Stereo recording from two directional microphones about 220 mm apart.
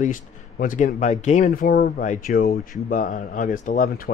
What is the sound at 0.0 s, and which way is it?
Speech, 35° left (ahead or behind).